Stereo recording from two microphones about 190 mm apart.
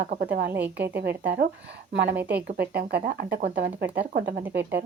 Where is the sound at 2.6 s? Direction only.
60° right (ahead or behind).